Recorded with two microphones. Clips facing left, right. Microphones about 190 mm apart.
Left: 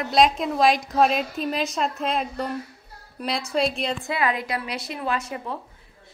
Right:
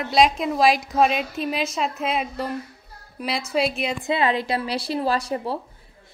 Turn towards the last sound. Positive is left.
turn(degrees=-35)  # may be behind; listen again after turning